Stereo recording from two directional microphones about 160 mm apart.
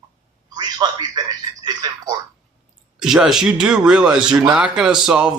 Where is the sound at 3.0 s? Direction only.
5° right (ahead or behind).